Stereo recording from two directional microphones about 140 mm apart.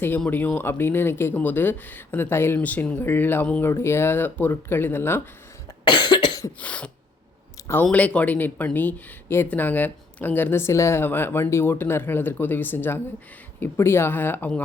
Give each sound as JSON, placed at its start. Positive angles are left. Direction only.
{"t": 0.3, "sound": "speech", "side_deg": 10}
{"t": 5.8, "sound": "cough", "side_deg": 35}
{"t": 6.6, "sound": "speech", "side_deg": 10}